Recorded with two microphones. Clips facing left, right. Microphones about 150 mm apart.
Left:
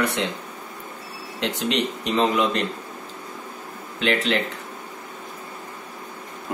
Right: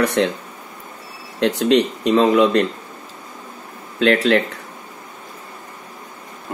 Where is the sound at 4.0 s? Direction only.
55° right (ahead or behind).